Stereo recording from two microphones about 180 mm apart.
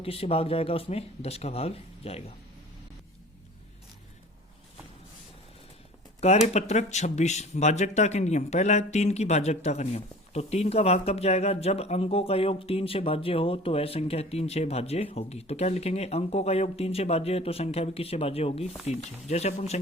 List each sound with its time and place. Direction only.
0.0 s speech: 30° left (ahead or behind)
6.1 s speech: 35° left (ahead or behind)